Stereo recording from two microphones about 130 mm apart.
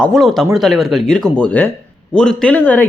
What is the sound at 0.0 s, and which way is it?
Speech, centre (ahead or behind).